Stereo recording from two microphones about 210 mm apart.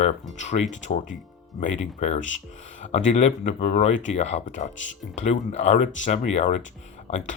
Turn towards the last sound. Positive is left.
turn(degrees=30)  # may be behind; listen again after turning